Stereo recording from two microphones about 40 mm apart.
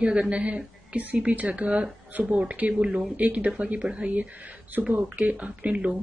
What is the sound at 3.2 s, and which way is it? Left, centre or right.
Speech, right.